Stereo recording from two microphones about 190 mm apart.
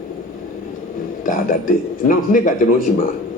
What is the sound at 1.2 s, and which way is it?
A man's voice, 50° left (ahead or behind).